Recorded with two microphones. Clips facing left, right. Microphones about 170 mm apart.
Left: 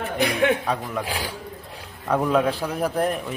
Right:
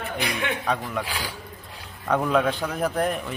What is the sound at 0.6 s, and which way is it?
Speech, 5° left (ahead or behind).